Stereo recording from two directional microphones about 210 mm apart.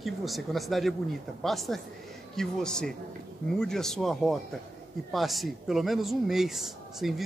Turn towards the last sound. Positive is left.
turn(degrees=0)  # may be behind; listen again after turning